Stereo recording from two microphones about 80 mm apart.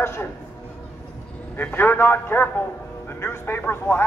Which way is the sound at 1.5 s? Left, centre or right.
Left.